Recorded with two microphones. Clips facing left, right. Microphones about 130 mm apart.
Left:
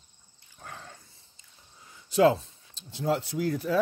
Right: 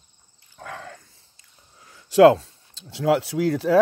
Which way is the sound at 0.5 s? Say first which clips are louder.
Right 8 dB; 90° right.